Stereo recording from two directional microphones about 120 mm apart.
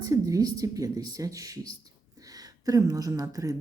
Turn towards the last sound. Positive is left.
turn(degrees=-30)  # may be behind; listen again after turning